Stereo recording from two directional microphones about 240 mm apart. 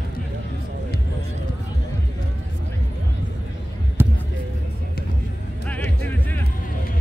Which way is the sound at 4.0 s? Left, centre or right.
Centre.